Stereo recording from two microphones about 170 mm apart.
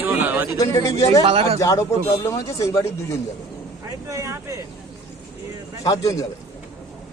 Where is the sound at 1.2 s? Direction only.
35° right (ahead or behind).